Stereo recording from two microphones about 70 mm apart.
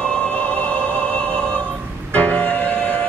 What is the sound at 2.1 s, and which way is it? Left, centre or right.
Music, centre.